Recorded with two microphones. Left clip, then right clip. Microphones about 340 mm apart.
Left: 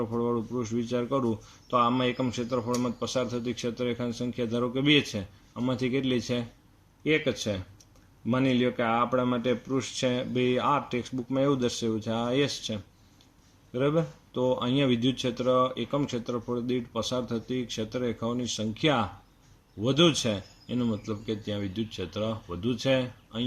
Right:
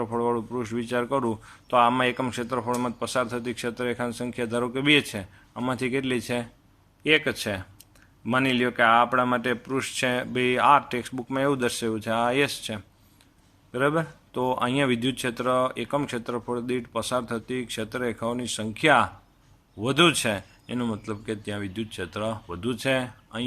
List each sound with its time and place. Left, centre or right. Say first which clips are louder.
0.0 s a man's voice: right 3 dB; right